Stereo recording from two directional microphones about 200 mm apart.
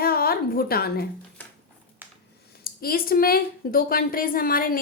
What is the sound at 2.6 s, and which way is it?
Speech, 45° left (ahead or behind).